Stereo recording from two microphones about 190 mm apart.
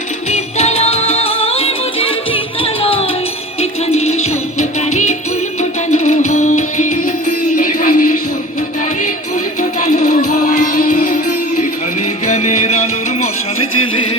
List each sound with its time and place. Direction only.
0.3 s music: 35° left (ahead or behind)
9.6 s music: 40° left (ahead or behind)
12.2 s music: 40° left (ahead or behind)